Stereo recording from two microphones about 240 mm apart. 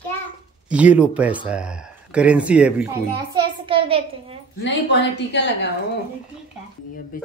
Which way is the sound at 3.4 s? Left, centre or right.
Right.